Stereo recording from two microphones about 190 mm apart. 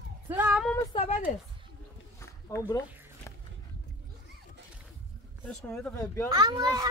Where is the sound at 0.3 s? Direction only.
10° right (ahead or behind).